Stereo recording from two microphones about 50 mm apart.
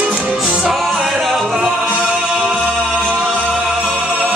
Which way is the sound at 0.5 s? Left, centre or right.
Centre.